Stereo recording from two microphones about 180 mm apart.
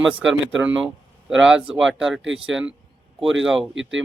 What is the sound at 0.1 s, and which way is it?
Speech, 5° right (ahead or behind).